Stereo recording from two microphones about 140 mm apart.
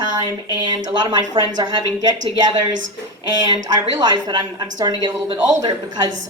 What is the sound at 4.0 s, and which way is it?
A woman's voice, 30° right (ahead or behind).